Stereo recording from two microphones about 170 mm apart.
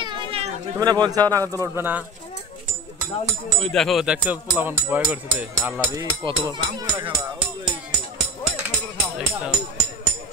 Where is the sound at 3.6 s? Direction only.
5° left (ahead or behind).